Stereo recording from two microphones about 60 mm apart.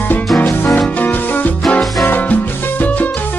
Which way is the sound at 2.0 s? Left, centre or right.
Left.